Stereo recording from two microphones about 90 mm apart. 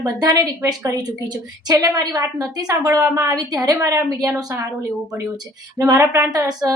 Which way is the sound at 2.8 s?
30° right (ahead or behind).